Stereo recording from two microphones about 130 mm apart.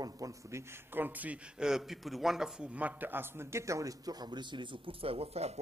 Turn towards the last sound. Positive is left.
turn(degrees=-50)  # may be behind; listen again after turning